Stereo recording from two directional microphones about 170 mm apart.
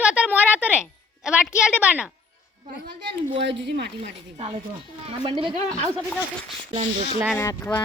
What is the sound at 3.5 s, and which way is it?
Speech, 90° right.